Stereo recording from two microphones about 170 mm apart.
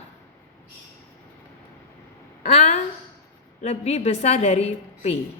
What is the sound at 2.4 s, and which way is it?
A woman's voice, 40° left (ahead or behind).